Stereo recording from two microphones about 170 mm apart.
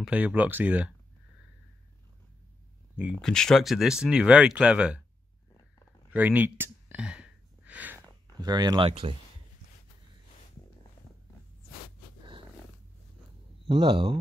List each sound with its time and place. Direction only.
0.0 s speech: 10° right (ahead or behind)
3.0 s speech: centre (ahead or behind)
6.1 s a sound: 10° right (ahead or behind)
8.4 s speech: 25° right (ahead or behind)
13.7 s speech: 30° right (ahead or behind)